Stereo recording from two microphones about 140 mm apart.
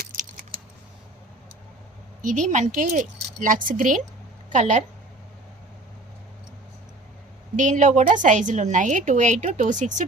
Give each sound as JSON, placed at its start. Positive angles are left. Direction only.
{"t": 0.0, "sound": "keys jangling", "side_deg": -65}
{"t": 2.2, "sound": "speech", "side_deg": -60}
{"t": 4.4, "sound": "speech", "side_deg": -60}
{"t": 7.5, "sound": "a woman's voice", "side_deg": -65}